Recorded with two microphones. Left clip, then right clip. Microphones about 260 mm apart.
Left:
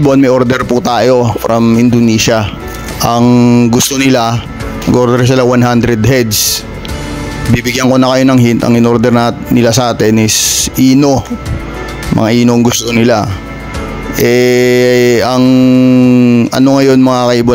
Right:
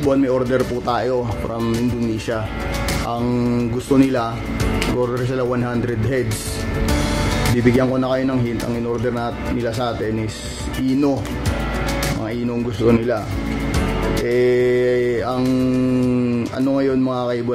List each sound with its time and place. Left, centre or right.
0.1 s mantra: left
7.8 s mantra: left
12.2 s mantra: left
14.2 s mantra: left